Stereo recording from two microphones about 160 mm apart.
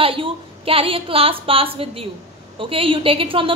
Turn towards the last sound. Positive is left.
turn(degrees=-35)  # may be behind; listen again after turning